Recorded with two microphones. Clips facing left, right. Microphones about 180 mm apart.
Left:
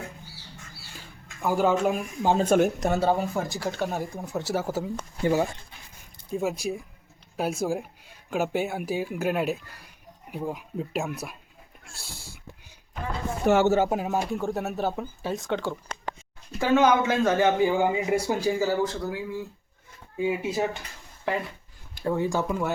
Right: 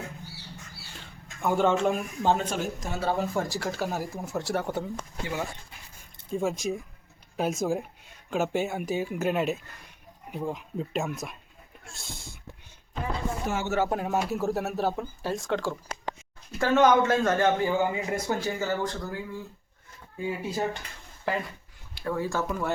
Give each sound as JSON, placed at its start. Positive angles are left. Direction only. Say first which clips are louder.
{"t": 0.9, "sound": "speech", "louder": "left 1 dB", "side_deg": 5}
{"t": 2.4, "sound": "speech", "louder": "left 10 dB", "side_deg": 55}
{"t": 3.3, "sound": "speech", "louder": "left 1 dB", "side_deg": 0}
{"t": 6.3, "sound": "speech", "louder": "even", "side_deg": 5}
{"t": 11.9, "sound": "speech", "louder": "right 1 dB", "side_deg": -20}
{"t": 13.4, "sound": "speech", "louder": "left 14 dB", "side_deg": 70}
{"t": 13.7, "sound": "speech", "louder": "left 5 dB", "side_deg": 20}
{"t": 13.9, "sound": "speech", "louder": "left 1 dB", "side_deg": 0}
{"t": 17.6, "sound": "speech", "louder": "left 3 dB", "side_deg": 15}
{"t": 21.3, "sound": "speech", "louder": "left 1 dB", "side_deg": 0}
{"t": 22.0, "sound": "speech", "louder": "left 3 dB", "side_deg": 20}